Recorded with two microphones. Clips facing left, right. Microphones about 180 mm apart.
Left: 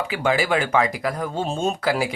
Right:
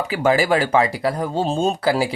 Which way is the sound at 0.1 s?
40° right (ahead or behind).